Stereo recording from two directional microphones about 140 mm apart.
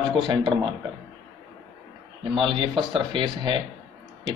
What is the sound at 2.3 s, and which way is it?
Speech, 35° right (ahead or behind).